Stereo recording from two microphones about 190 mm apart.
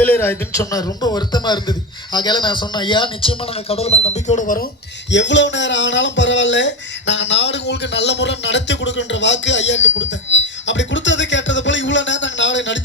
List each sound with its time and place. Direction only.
0.0 s speech: 10° left (ahead or behind); by 4.6 s 45° left (ahead or behind)
5.1 s speech: 70° left (ahead or behind)